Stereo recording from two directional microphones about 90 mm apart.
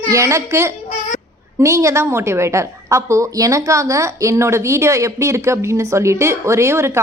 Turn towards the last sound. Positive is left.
turn(degrees=-30)  # may be behind; listen again after turning